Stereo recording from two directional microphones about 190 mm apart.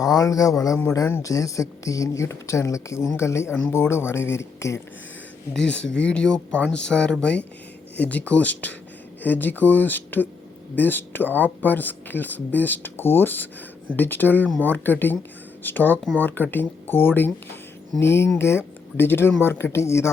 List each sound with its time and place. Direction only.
0.0 s speech: 20° left (ahead or behind)